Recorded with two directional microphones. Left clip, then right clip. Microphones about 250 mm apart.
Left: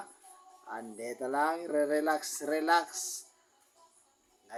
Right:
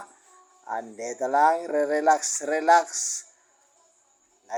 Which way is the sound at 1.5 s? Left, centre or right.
Right.